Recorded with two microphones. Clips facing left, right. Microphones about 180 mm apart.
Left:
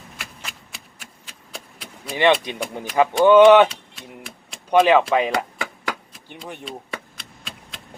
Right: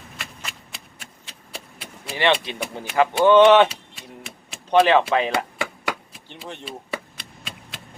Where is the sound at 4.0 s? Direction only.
5° right (ahead or behind).